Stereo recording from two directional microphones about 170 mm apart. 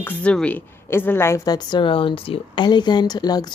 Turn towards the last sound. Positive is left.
turn(degrees=25)  # may be behind; listen again after turning